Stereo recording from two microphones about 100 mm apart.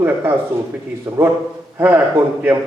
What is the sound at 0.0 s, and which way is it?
A man's voice, 20° right (ahead or behind).